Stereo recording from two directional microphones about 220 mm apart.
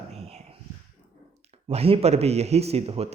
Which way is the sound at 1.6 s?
25° right (ahead or behind).